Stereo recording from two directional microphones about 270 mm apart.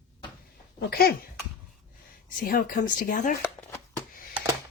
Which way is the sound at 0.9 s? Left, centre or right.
Left.